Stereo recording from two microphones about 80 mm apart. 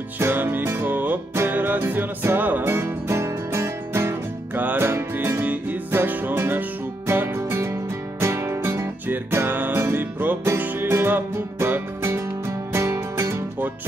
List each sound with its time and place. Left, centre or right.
0.2 s music: right